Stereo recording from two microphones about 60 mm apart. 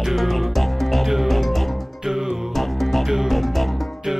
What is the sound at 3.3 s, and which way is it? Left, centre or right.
Music, centre.